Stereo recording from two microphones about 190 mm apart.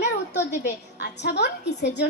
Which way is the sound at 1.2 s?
60° left (ahead or behind).